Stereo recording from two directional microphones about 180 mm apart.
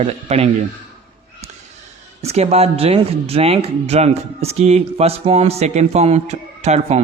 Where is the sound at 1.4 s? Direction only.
35° right (ahead or behind).